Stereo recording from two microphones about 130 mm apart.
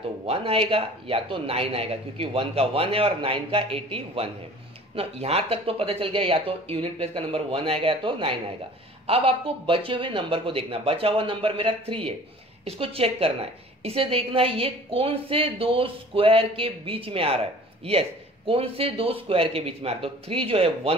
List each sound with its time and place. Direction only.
0.3 s a man's voice: 45° right (ahead or behind)
18.5 s a man's voice: 45° right (ahead or behind)